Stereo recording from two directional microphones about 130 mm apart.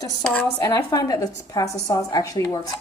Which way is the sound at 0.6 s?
20° left (ahead or behind).